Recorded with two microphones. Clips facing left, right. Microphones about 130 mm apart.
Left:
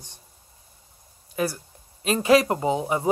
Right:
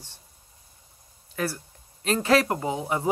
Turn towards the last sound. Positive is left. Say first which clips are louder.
# left 4 dB
turn(degrees=20)  # may be behind; listen again after turning